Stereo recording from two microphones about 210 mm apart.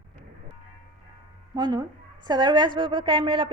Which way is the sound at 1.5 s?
20° right (ahead or behind).